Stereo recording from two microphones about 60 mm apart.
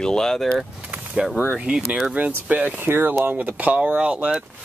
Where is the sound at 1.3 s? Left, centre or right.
Right.